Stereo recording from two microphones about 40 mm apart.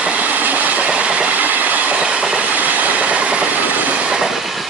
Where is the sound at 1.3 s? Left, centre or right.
Right.